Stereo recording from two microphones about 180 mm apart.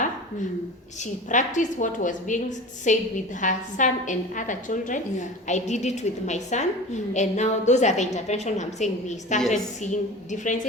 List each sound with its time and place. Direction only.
1.3 s a woman's voice: 45° left (ahead or behind)